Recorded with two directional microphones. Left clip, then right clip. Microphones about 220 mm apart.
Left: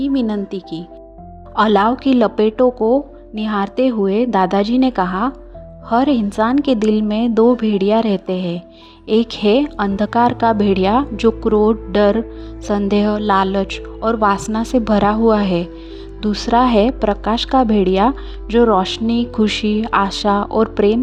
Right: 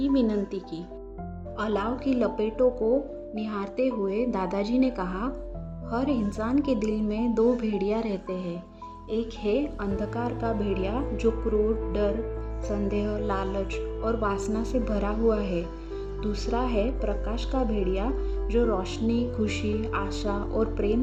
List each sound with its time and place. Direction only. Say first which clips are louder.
0.0 s speech: left 6 dB; 25° left (ahead or behind)
1.5 s a woman's voice: left 15 dB; 40° left (ahead or behind)